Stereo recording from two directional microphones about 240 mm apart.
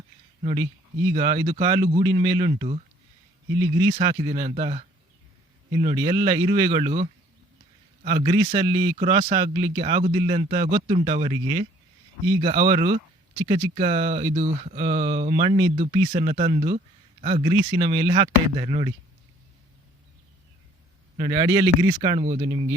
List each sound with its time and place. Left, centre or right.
0.4 s speech: centre
3.5 s speech: centre
4.4 s speech: right
8.0 s speech: centre
12.4 s speech: right
12.6 s speech: right
14.8 s speech: centre
21.2 s speech: centre